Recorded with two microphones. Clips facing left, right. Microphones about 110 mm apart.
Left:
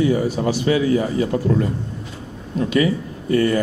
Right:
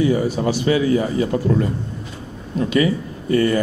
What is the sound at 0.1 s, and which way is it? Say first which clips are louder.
A man's voice: even; 20° right (ahead or behind).